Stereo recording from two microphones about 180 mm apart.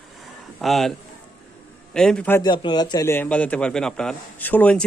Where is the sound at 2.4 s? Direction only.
25° left (ahead or behind).